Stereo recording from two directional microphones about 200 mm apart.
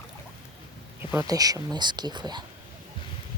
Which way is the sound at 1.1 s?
15° right (ahead or behind).